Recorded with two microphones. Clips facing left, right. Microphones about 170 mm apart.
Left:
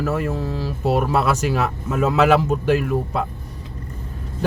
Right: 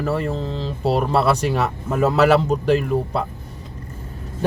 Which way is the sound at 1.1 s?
35° right (ahead or behind).